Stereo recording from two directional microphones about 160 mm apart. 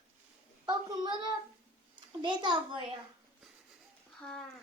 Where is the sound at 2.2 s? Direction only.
30° right (ahead or behind).